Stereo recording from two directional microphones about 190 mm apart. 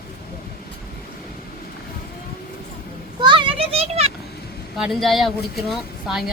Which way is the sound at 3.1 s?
25° right (ahead or behind).